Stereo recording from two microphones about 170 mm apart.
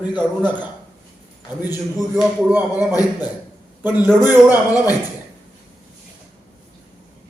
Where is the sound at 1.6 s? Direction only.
10° right (ahead or behind).